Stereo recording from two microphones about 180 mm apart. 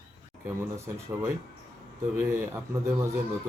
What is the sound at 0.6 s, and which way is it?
Speech, 15° right (ahead or behind).